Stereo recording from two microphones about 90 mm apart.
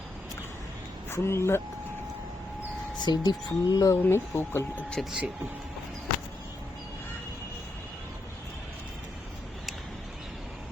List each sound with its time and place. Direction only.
1.1 s speech: 30° left (ahead or behind)
3.0 s speech: 50° left (ahead or behind)
3.9 s speech: 25° left (ahead or behind)
5.0 s speech: centre (ahead or behind)